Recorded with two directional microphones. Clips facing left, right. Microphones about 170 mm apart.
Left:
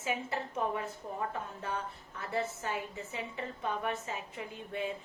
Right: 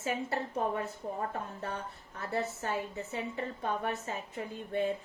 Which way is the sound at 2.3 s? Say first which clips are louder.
Right 1 dB; 40° right (ahead or behind).